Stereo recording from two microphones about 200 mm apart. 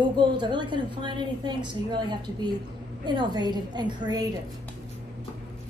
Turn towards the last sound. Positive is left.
turn(degrees=-20)  # may be behind; listen again after turning